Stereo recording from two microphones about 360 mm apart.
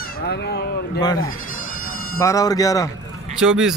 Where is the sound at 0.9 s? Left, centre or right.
Centre.